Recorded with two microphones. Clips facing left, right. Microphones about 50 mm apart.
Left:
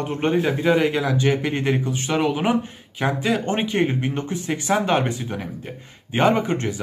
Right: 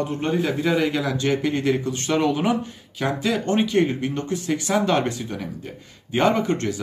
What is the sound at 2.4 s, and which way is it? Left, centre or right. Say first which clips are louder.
Speech: left 1 dB; left.